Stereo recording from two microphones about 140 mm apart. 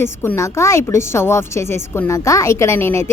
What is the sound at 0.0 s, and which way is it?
A woman's voice, 15° left (ahead or behind).